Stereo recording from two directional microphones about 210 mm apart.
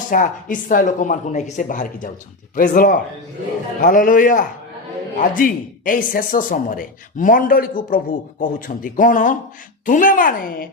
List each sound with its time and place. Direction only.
0.1 s speech: 40° left (ahead or behind)